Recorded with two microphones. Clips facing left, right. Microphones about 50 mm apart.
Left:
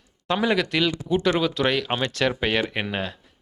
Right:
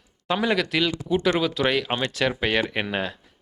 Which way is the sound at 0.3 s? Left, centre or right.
Centre.